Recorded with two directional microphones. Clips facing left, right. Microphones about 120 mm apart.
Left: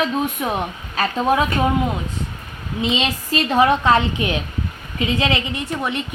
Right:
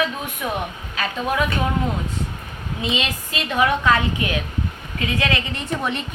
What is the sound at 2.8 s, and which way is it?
A woman's voice, 30° left (ahead or behind).